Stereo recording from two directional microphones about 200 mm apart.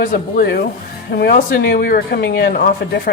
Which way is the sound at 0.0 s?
45° left (ahead or behind).